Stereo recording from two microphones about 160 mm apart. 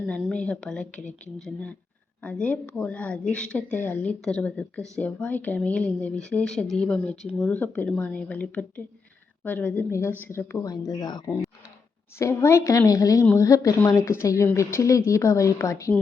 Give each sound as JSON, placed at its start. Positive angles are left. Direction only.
{"t": 0.1, "sound": "speech", "side_deg": 5}
{"t": 2.2, "sound": "a woman's voice", "side_deg": 10}